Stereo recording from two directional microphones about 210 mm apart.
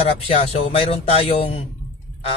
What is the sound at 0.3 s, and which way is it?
A man's voice, 30° left (ahead or behind).